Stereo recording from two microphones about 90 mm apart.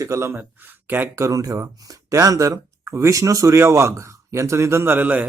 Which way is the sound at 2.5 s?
25° right (ahead or behind).